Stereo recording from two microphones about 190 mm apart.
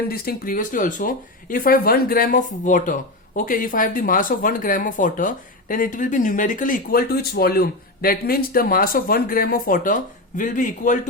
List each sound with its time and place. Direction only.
0.1 s speech: 50° left (ahead or behind)